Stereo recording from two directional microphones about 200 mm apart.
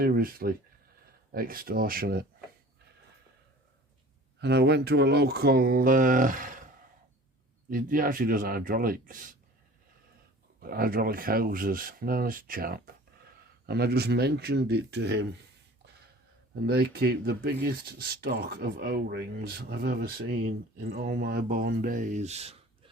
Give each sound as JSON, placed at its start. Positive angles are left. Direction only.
{"t": 0.0, "sound": "speech", "side_deg": -45}
{"t": 4.4, "sound": "speech", "side_deg": -55}
{"t": 7.7, "sound": "speech", "side_deg": -45}
{"t": 10.6, "sound": "speech", "side_deg": -45}
{"t": 16.6, "sound": "speech", "side_deg": -50}